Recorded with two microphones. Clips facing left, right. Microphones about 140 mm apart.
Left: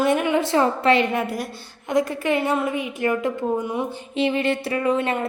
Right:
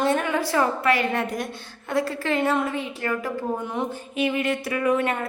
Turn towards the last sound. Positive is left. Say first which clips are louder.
# left 1 dB
turn(degrees=25)  # may be behind; listen again after turning